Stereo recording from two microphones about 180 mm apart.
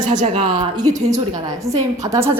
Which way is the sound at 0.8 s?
20° right (ahead or behind).